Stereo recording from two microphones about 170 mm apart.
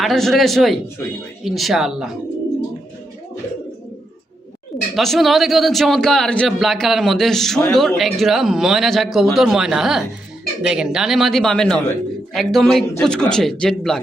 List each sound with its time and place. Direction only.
0.0 s a man's voice: centre (ahead or behind)
4.9 s a man's voice: centre (ahead or behind)